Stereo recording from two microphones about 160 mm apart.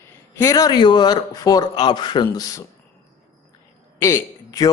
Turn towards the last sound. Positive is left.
turn(degrees=20)  # may be behind; listen again after turning